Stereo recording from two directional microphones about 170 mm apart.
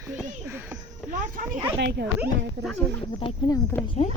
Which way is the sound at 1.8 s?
90° right.